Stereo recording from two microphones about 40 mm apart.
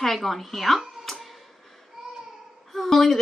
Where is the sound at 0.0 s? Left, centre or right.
Centre.